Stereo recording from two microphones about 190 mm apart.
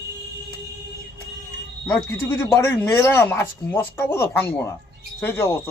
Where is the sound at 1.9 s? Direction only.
15° left (ahead or behind).